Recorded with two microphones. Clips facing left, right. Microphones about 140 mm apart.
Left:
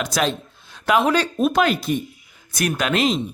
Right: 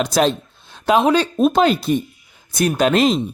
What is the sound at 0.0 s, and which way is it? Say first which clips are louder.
Speech: right 5 dB; 30° right (ahead or behind).